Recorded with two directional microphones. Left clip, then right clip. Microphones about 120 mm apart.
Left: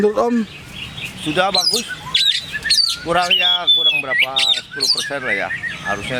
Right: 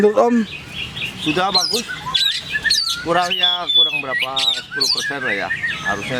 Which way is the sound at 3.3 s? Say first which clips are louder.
Left 1 dB; 5° left (ahead or behind).